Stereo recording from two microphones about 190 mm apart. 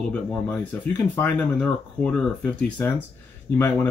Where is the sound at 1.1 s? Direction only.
5° left (ahead or behind).